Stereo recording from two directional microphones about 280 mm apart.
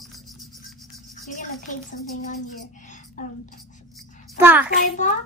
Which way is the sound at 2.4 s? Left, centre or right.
Left.